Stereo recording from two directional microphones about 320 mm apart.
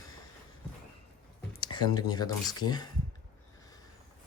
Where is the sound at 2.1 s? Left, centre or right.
Centre.